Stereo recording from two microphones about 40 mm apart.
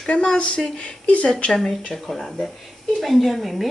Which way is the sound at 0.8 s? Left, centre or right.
Left.